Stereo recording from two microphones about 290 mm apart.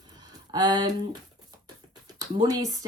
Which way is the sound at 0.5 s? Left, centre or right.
Centre.